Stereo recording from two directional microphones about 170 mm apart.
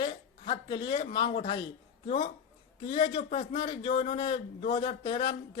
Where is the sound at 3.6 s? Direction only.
25° left (ahead or behind).